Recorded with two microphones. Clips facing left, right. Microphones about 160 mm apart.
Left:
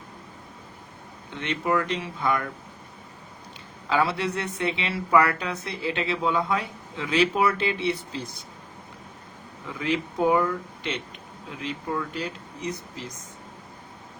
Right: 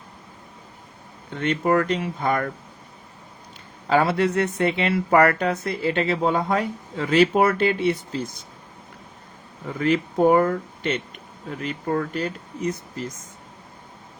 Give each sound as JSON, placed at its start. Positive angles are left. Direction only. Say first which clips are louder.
{"t": 1.4, "sound": "speech", "louder": "right 5 dB", "side_deg": -50}
{"t": 3.8, "sound": "speech", "louder": "right 5 dB", "side_deg": -50}
{"t": 9.6, "sound": "speech", "louder": "right 6 dB", "side_deg": -50}